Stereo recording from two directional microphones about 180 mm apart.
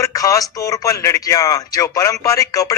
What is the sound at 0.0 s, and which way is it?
Speech, 20° left (ahead or behind).